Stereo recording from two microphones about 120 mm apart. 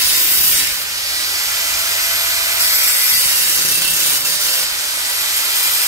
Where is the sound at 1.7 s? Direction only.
25° right (ahead or behind).